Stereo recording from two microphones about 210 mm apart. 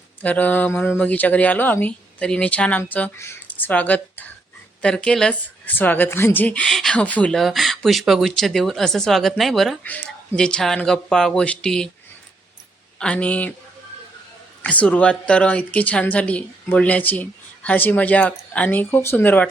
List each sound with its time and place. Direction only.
0.2 s speech: 5° left (ahead or behind)
13.0 s speech: 5° left (ahead or behind)
14.6 s speech: 5° left (ahead or behind)